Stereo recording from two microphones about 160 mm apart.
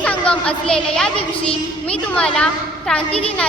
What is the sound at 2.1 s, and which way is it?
Speech, 5° left (ahead or behind).